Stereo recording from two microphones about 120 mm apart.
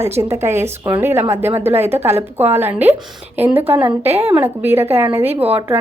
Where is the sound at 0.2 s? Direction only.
20° right (ahead or behind).